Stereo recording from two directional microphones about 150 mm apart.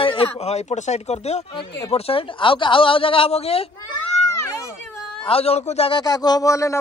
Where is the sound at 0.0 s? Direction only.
40° left (ahead or behind).